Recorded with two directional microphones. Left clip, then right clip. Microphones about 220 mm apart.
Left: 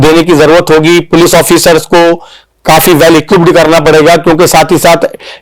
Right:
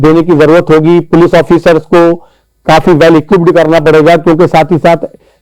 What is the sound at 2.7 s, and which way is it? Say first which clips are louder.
Music: left 1 dB; 30° left (ahead or behind).